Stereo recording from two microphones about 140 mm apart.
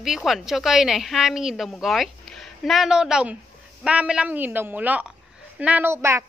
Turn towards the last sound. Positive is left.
turn(degrees=-20)  # may be behind; listen again after turning